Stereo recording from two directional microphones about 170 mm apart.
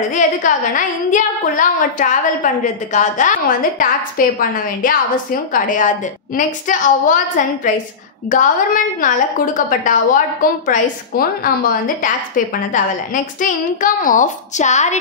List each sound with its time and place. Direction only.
0.1 s a woman's voice: 50° left (ahead or behind)
4.4 s a woman's voice: 55° left (ahead or behind)